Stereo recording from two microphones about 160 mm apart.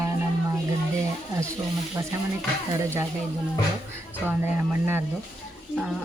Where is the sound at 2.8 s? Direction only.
15° right (ahead or behind).